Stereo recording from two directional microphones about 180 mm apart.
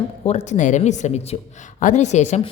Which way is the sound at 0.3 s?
40° left (ahead or behind).